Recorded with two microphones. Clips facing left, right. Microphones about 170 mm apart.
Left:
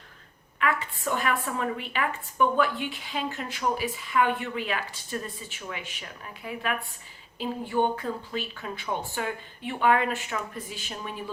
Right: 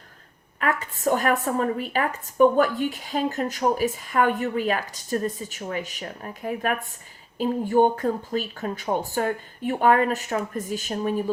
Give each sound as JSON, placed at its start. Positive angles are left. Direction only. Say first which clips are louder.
{"t": 0.6, "sound": "a woman's voice", "louder": "right 4 dB", "side_deg": -40}